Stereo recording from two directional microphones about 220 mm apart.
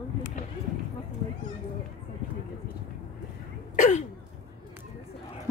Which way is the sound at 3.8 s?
35° left (ahead or behind).